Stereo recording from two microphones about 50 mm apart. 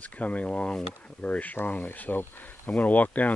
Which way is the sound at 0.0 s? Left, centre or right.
Left.